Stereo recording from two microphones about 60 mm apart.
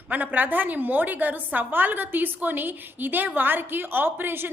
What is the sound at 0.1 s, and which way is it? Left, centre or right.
A woman's voice, right.